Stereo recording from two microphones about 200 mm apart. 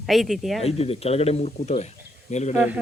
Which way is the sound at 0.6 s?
30° left (ahead or behind).